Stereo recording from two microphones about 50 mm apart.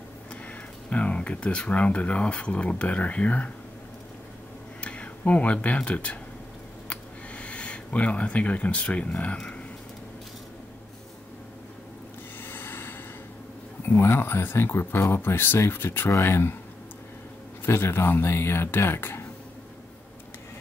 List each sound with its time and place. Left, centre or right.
0.8 s speech: left
4.8 s speech: left
6.9 s a sound: left
12.4 s a sound: left
13.8 s speech: left
17.6 s speech: left